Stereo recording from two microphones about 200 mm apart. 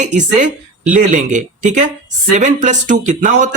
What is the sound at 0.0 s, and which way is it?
Speech, 35° right (ahead or behind).